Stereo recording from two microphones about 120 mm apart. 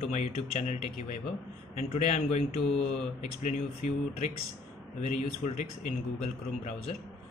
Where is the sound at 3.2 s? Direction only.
80° left.